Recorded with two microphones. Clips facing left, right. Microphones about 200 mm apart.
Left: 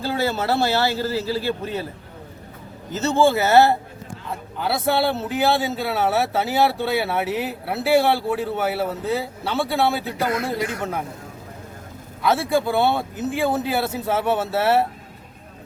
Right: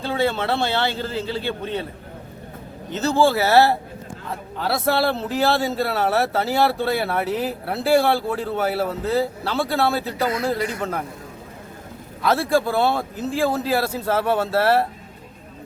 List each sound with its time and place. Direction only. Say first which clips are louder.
0.0 s speech: right 1 dB; 5° left (ahead or behind)
2.9 s speech: even; centre (ahead or behind)
4.6 s speech: even; centre (ahead or behind)
12.2 s speech: right 1 dB; centre (ahead or behind)
13.1 s speech: right 1 dB; 20° left (ahead or behind)
13.5 s speech: right 1 dB; centre (ahead or behind)